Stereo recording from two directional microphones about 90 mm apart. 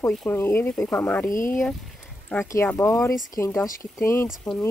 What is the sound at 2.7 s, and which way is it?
Speech, 35° left (ahead or behind).